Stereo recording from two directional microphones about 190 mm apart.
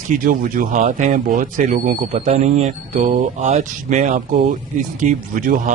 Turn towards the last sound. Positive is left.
turn(degrees=-45)  # may be behind; listen again after turning